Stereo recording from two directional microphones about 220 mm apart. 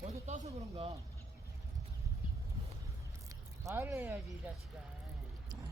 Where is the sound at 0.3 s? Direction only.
30° right (ahead or behind).